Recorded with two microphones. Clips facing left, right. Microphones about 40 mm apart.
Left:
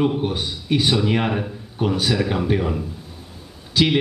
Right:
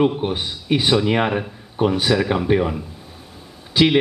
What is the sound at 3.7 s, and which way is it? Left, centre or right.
Speech, centre.